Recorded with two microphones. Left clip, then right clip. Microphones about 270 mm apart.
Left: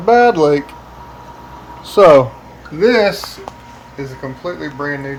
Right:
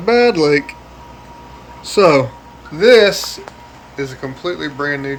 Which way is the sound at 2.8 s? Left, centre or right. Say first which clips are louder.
Right 3 dB; centre.